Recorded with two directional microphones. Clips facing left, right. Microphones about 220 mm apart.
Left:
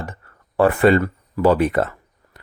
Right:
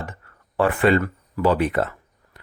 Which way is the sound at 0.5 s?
40° left (ahead or behind).